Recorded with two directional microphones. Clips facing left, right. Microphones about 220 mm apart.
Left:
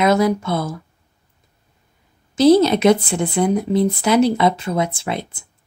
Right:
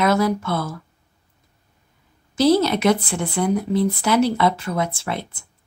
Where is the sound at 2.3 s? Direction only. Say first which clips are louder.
Left 4 dB; 20° left (ahead or behind).